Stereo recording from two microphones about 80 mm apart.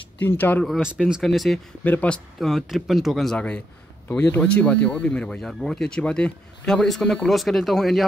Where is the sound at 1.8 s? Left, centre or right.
Centre.